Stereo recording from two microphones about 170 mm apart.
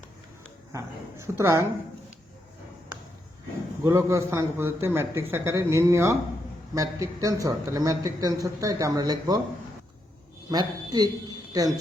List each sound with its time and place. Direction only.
0.7 s a man's voice: 15° right (ahead or behind)
3.8 s a man's voice: 20° right (ahead or behind)
10.5 s a man's voice: 25° right (ahead or behind)